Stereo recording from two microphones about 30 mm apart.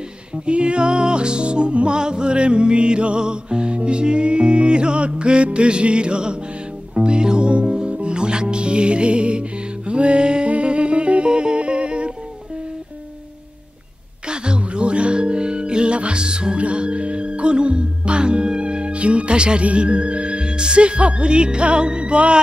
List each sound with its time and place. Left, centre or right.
0.5 s music: right
2.0 s music: right
14.3 s music: right